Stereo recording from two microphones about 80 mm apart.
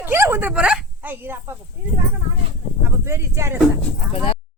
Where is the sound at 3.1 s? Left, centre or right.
Right.